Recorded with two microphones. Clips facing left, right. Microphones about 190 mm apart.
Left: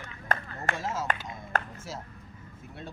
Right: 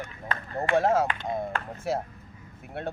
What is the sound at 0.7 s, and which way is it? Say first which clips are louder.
Speech: right 14 dB; 60° right (ahead or behind).